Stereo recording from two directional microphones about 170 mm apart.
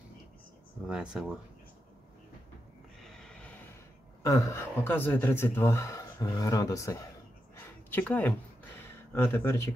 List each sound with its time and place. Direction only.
0.8 s speech: 5° right (ahead or behind)
3.0 s snort: 5° left (ahead or behind)
4.2 s speech: 20° left (ahead or behind)
7.5 s a sound: 10° left (ahead or behind)